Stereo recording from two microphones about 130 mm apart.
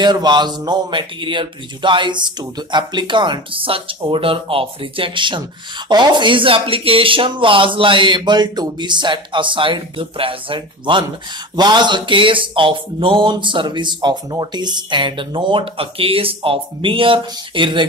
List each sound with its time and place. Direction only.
0.0 s speech: 35° right (ahead or behind)